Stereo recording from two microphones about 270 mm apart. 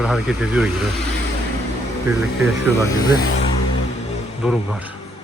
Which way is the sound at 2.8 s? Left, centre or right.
Centre.